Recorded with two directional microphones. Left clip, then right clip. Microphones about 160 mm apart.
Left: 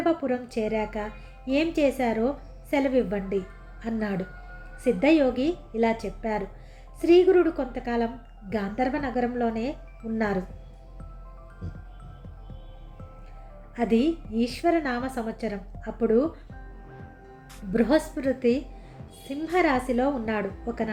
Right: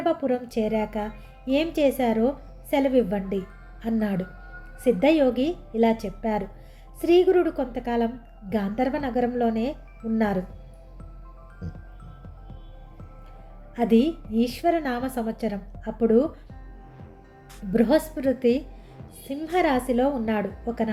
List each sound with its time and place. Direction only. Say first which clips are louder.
0.0 s a woman's voice: right 1 dB; 40° right (ahead or behind)
13.7 s a woman's voice: right 2 dB; 40° right (ahead or behind)
17.7 s a woman's voice: right 2 dB; 40° right (ahead or behind)